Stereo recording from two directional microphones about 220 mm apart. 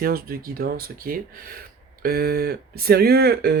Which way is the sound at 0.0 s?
40° right (ahead or behind).